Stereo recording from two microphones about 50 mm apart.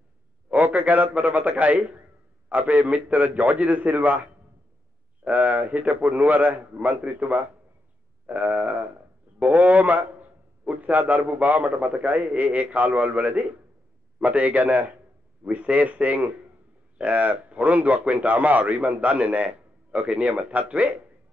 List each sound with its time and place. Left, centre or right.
0.5 s a man's voice: right